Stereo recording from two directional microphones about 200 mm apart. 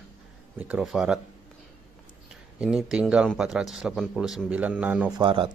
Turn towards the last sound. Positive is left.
turn(degrees=-25)  # may be behind; listen again after turning